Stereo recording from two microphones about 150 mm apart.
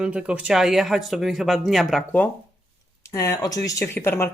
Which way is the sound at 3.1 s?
20° left (ahead or behind).